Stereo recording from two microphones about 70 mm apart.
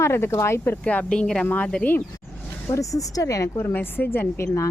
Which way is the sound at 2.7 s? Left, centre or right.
Left.